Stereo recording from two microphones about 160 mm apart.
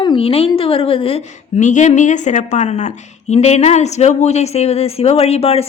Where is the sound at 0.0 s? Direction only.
30° left (ahead or behind).